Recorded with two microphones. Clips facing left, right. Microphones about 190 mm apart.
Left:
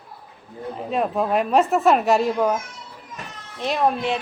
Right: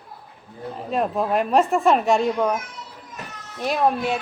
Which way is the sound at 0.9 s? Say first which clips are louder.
Even; centre (ahead or behind).